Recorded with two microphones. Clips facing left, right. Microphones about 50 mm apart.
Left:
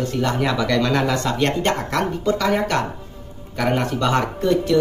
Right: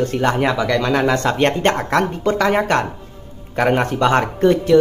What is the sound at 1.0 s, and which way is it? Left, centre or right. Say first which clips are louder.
Speech: right 4 dB; right.